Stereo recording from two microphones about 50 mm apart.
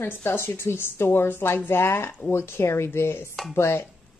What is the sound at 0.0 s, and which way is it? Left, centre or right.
A woman's voice, left.